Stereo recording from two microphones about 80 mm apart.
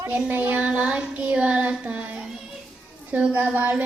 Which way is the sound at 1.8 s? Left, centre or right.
Centre.